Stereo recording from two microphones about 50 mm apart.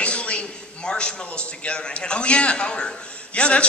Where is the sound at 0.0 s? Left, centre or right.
Left.